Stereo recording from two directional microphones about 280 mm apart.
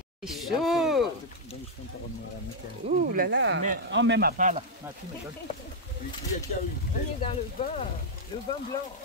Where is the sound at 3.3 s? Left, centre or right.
Right.